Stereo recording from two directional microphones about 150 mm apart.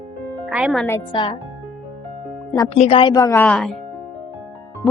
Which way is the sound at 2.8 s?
40° left (ahead or behind).